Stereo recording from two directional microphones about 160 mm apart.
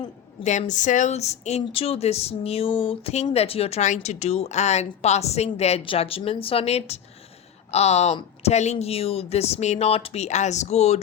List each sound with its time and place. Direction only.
0.4 s speech: 50° left (ahead or behind)